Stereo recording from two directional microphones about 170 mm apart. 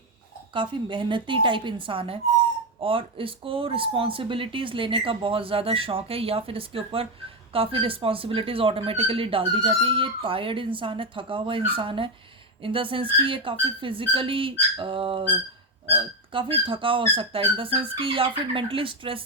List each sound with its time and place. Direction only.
0.5 s speech: 30° right (ahead or behind)